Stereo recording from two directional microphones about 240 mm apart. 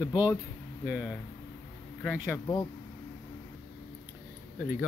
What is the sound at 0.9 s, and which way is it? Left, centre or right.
Speech, centre.